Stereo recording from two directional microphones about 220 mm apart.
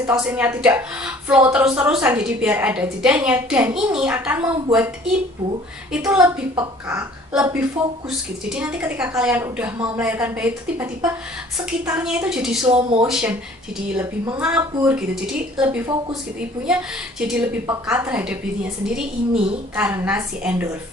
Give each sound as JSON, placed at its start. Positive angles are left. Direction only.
{"t": 0.0, "sound": "a woman's voice", "side_deg": -5}
{"t": 5.9, "sound": "a woman's voice", "side_deg": -5}
{"t": 6.5, "sound": "speech", "side_deg": -20}
{"t": 7.0, "sound": "a woman's voice", "side_deg": -5}
{"t": 17.3, "sound": "a woman's voice", "side_deg": -5}